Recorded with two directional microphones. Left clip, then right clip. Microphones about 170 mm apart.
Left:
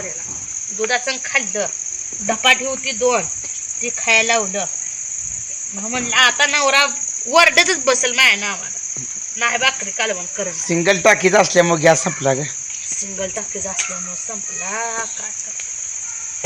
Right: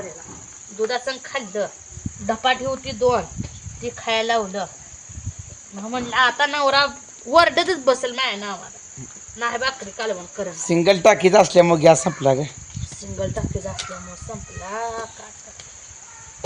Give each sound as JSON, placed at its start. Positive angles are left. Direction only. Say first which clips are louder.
{"t": 0.9, "sound": "speech", "louder": "left 7 dB", "side_deg": -10}
{"t": 2.2, "sound": "speech", "louder": "left 5 dB", "side_deg": 0}
{"t": 2.8, "sound": "cricket", "louder": "left 2 dB", "side_deg": 20}
{"t": 5.9, "sound": "speech", "louder": "left 4 dB", "side_deg": 15}